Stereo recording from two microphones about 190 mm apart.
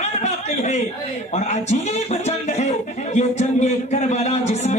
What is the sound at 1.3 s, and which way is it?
A man's voice, 35° left (ahead or behind).